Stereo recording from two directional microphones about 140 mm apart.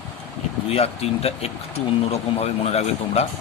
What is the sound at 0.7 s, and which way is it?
Speech, 45° left (ahead or behind).